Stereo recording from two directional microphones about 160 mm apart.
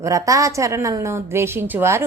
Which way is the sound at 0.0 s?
20° right (ahead or behind).